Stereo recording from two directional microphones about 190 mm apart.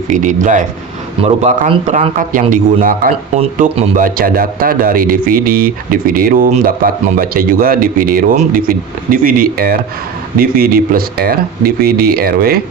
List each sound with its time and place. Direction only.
0.1 s speech: 40° right (ahead or behind)
1.2 s a man's voice: 30° right (ahead or behind)
4.0 s speech: 50° right (ahead or behind)